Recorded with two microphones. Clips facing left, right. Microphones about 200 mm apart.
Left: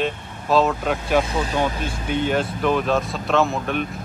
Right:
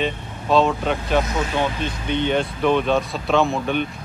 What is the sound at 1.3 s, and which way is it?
Speech, 30° left (ahead or behind).